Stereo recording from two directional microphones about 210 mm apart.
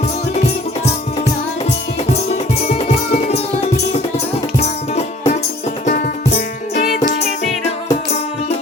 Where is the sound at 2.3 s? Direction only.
30° left (ahead or behind).